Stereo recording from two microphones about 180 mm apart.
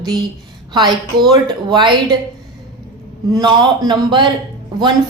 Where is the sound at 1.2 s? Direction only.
25° right (ahead or behind).